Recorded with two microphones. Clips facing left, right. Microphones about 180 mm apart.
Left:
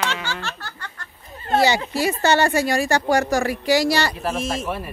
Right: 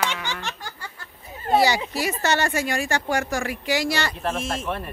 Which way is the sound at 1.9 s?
30° left (ahead or behind).